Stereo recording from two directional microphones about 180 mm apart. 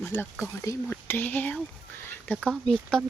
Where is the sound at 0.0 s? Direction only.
10° left (ahead or behind).